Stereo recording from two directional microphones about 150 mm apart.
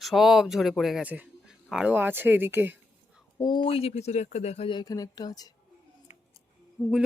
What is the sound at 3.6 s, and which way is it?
Speech, 40° left (ahead or behind).